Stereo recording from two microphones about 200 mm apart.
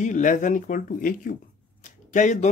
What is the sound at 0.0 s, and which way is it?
Speech, 40° left (ahead or behind).